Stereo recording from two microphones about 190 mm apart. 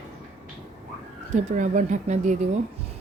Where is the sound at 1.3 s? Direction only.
40° right (ahead or behind).